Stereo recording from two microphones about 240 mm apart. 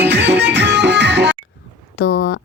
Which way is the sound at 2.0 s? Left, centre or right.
Left.